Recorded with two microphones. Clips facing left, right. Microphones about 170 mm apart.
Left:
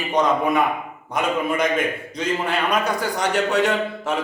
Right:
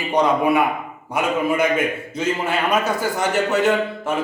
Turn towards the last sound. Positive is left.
turn(degrees=0)  # may be behind; listen again after turning